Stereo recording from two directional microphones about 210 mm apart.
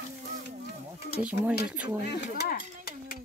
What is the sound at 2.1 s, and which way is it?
Speech, 45° left (ahead or behind).